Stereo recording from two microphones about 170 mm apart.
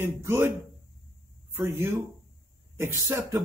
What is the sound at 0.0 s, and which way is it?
Speech, 15° right (ahead or behind).